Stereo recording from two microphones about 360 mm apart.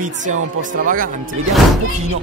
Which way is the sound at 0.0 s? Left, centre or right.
Right.